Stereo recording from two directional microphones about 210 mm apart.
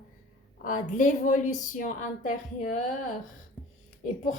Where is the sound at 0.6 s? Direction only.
40° left (ahead or behind).